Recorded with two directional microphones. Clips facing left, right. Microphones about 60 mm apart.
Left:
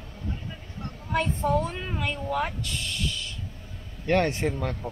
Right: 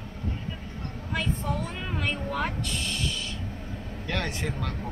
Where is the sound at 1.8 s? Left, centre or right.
Centre.